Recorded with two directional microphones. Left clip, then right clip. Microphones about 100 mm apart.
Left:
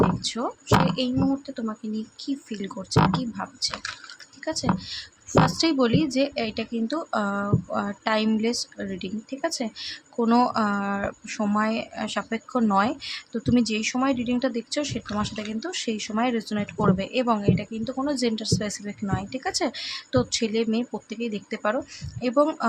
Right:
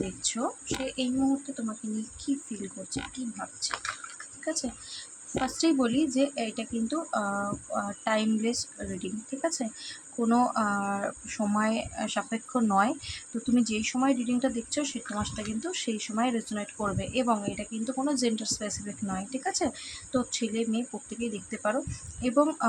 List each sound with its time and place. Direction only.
0.2 s a sound: 15° left (ahead or behind)
0.9 s speech: 20° left (ahead or behind)
1.5 s speech: 35° left (ahead or behind)